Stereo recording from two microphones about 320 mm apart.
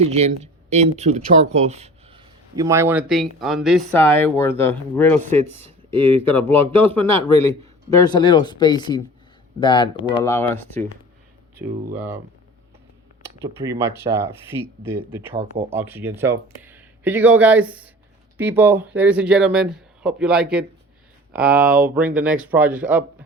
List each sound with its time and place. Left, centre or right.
0.0 s speech: centre
6.7 s speech: centre
7.2 s a man's voice: centre
7.9 s speech: centre
11.9 s speech: centre
13.2 s speech: centre